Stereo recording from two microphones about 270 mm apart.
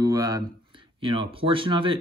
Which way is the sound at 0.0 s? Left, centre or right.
Centre.